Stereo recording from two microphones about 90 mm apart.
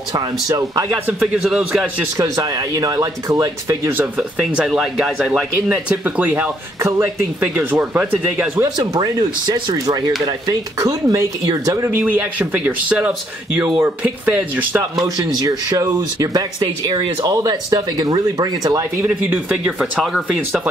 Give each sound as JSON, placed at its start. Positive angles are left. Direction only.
{"t": 0.1, "sound": "speech", "side_deg": -45}
{"t": 1.2, "sound": "speech", "side_deg": -5}
{"t": 2.1, "sound": "speech", "side_deg": -40}
{"t": 4.2, "sound": "speech", "side_deg": -10}
{"t": 5.7, "sound": "speech", "side_deg": -15}
{"t": 6.8, "sound": "speech", "side_deg": -35}
{"t": 7.8, "sound": "speech", "side_deg": -15}
{"t": 8.6, "sound": "speech", "side_deg": -50}
{"t": 11.9, "sound": "speech", "side_deg": -15}
{"t": 14.0, "sound": "speech", "side_deg": -20}
{"t": 14.8, "sound": "speech", "side_deg": -45}
{"t": 19.0, "sound": "speech", "side_deg": -15}
{"t": 19.8, "sound": "speech", "side_deg": 0}